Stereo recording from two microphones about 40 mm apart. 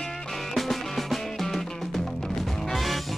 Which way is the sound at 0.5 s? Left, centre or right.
Centre.